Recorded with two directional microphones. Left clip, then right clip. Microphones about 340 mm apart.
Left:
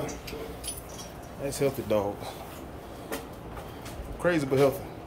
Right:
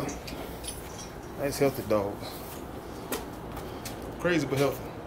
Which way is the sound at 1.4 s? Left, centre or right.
Centre.